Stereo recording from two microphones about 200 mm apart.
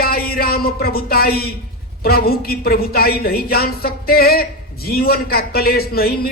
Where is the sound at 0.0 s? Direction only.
50° left (ahead or behind).